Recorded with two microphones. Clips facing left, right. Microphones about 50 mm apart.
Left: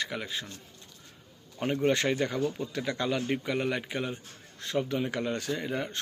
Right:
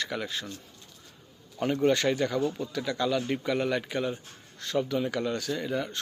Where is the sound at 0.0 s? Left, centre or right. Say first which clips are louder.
Right 1 dB; centre.